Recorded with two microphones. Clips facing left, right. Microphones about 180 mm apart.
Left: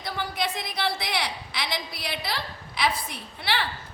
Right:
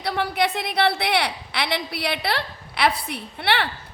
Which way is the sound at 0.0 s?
70° right (ahead or behind).